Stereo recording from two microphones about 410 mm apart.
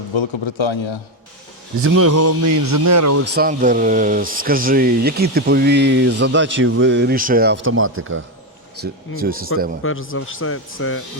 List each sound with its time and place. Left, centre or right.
0.1 s a man's voice: left
1.8 s speech: right
3.3 s speech: centre
9.8 s a man's voice: left